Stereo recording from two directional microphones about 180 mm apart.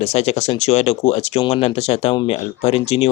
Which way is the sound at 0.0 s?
35° left (ahead or behind).